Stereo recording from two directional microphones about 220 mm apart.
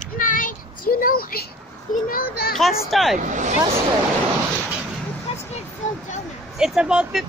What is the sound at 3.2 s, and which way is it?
Speech, 35° right (ahead or behind).